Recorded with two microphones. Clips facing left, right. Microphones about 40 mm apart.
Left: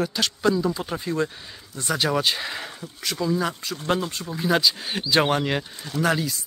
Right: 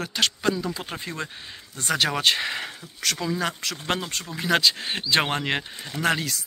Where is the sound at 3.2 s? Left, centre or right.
Right.